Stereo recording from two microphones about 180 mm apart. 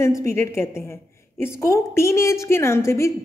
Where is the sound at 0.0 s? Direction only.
15° left (ahead or behind).